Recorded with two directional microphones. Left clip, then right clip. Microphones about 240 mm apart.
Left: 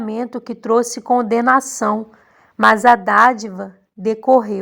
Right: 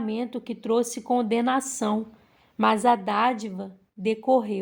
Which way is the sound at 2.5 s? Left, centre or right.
Left.